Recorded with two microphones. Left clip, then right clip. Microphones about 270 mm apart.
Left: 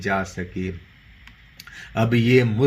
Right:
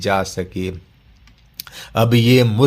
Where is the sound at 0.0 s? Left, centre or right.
Right.